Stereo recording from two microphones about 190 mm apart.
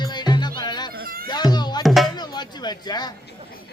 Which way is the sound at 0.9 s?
50° right (ahead or behind).